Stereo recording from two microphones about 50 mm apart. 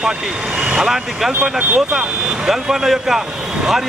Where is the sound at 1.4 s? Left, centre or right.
Right.